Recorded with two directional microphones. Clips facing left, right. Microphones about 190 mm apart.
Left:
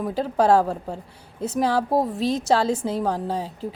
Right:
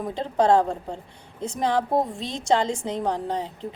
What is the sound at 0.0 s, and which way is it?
A woman's voice, 5° left (ahead or behind).